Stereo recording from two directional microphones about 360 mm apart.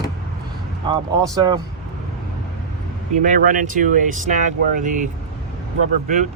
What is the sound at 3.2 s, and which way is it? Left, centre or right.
Speech, right.